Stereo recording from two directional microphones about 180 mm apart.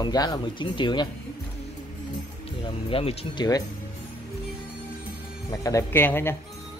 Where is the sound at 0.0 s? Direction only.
25° left (ahead or behind).